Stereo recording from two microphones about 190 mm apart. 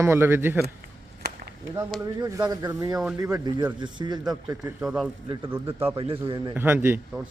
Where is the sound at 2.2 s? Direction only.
20° right (ahead or behind).